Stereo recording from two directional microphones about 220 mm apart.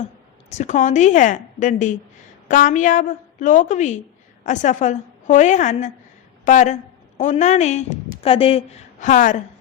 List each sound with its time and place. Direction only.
0.5 s a woman's voice: 35° left (ahead or behind)